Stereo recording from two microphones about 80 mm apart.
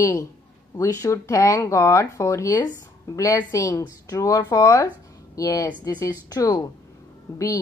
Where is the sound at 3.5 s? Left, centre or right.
Left.